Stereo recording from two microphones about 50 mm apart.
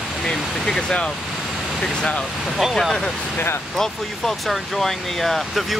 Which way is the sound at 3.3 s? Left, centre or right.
Left.